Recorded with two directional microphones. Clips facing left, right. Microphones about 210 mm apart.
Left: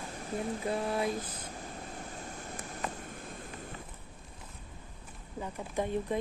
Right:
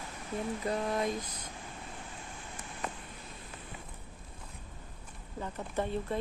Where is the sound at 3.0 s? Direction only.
50° left (ahead or behind).